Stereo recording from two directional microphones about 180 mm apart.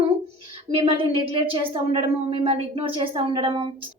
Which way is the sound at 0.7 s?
30° right (ahead or behind).